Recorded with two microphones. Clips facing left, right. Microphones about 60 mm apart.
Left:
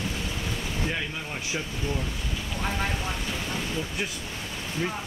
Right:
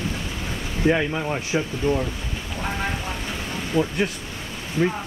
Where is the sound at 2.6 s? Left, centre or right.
Centre.